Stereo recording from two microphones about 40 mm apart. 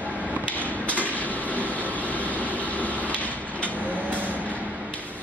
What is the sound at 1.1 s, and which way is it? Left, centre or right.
Train, left.